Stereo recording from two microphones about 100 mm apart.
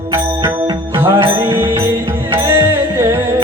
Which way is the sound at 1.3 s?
25° right (ahead or behind).